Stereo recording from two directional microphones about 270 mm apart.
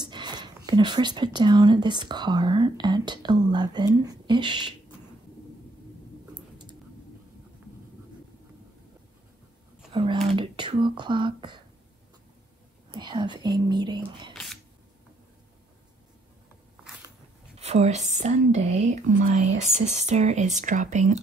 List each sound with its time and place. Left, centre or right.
0.0 s speech: centre
9.9 s speech: centre
12.9 s speech: centre
14.3 s a sound: centre
17.6 s speech: right